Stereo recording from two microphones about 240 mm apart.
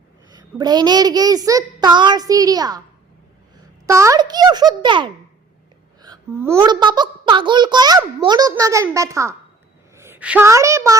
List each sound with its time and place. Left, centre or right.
0.3 s a child's voice: centre
3.8 s a child's voice: centre